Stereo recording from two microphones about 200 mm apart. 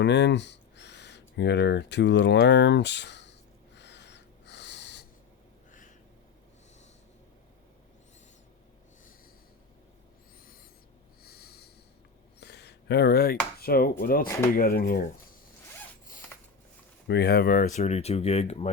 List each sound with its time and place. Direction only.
0.0 s speech: 60° left (ahead or behind)
3.8 s snort: 60° left (ahead or behind)
11.2 s snort: 50° left (ahead or behind)
12.4 s chopping: 55° left (ahead or behind)
14.0 s speech: 45° left (ahead or behind)
16.3 s a sound: 10° left (ahead or behind)
17.1 s speech: 55° left (ahead or behind); by 18.7 s 30° left (ahead or behind)